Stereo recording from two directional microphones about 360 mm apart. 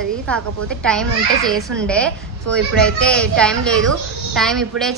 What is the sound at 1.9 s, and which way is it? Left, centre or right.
A woman's voice, centre.